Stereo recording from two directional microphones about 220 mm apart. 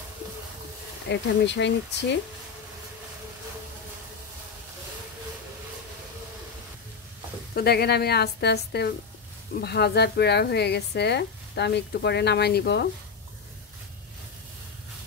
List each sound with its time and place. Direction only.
1.0 s speech: 50° left (ahead or behind)
7.5 s speech: 45° left (ahead or behind)